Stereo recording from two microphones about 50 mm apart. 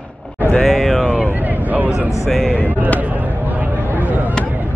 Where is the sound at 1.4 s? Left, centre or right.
Right.